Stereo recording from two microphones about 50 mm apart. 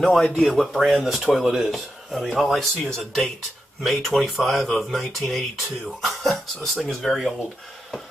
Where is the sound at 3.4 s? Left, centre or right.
Centre.